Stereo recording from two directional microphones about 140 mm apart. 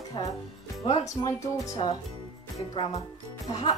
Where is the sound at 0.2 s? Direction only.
35° left (ahead or behind).